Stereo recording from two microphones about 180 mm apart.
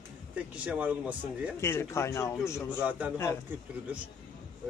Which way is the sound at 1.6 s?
15° left (ahead or behind).